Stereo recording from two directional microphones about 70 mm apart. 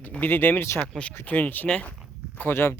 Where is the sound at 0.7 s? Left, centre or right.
Centre.